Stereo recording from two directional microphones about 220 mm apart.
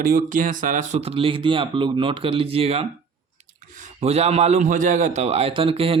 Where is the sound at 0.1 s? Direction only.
40° right (ahead or behind).